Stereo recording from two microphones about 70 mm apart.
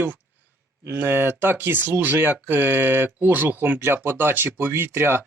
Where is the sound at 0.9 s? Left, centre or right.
Right.